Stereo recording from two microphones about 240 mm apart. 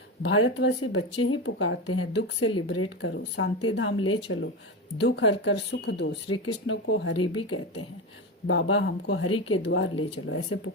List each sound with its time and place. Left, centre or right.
0.3 s speech: left
4.9 s speech: left